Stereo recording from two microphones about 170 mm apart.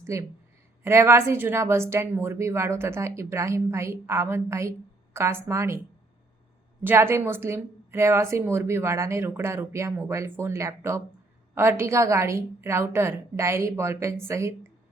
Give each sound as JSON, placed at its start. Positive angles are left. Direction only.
{"t": 0.0, "sound": "a woman's voice", "side_deg": -15}
{"t": 6.8, "sound": "a woman's voice", "side_deg": -15}